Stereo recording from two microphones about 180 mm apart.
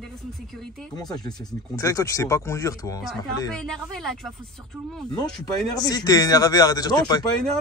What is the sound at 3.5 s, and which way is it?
Speech, 5° left (ahead or behind).